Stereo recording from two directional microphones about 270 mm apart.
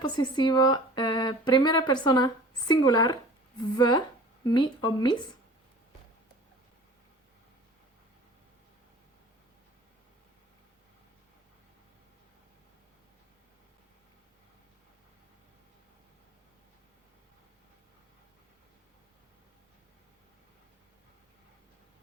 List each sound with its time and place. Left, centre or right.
0.0 s speech: centre